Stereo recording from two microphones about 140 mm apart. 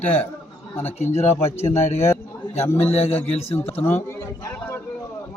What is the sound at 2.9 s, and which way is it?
Speech, 45° left (ahead or behind).